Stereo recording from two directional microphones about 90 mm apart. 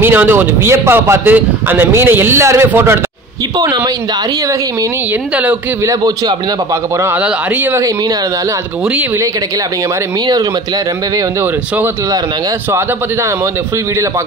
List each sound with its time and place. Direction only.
0.0 s speech: 25° right (ahead or behind)
5.9 s a man's voice: 50° right (ahead or behind)